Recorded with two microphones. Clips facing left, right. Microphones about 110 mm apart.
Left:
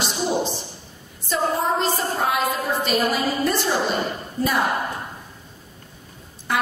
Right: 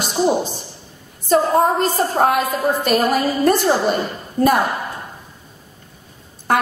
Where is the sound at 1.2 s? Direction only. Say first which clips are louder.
Right 8 dB; 50° right (ahead or behind).